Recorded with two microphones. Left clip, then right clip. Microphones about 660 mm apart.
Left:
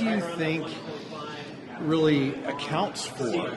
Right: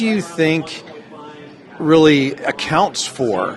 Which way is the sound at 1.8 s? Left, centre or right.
Right.